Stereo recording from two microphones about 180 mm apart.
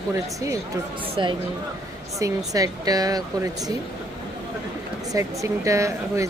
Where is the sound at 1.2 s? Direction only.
25° right (ahead or behind).